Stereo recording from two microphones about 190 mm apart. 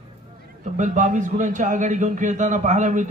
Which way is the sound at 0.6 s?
40° right (ahead or behind).